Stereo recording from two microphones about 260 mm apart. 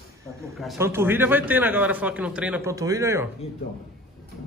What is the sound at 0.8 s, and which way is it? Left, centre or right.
A man's voice, centre.